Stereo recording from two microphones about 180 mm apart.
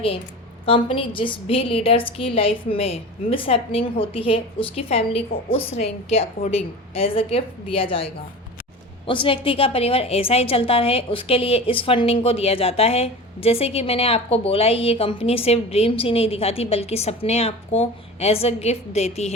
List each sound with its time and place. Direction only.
0.6 s a woman's voice: 30° left (ahead or behind)